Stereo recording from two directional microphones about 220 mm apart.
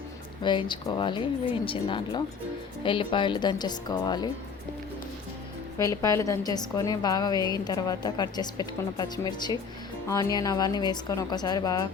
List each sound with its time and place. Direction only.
0.4 s a woman's voice: 20° left (ahead or behind)
5.8 s a woman's voice: 15° left (ahead or behind)